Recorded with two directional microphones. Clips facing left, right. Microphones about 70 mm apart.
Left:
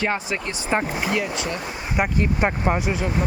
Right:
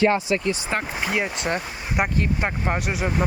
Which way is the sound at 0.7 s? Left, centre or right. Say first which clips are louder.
Left 8 dB; centre.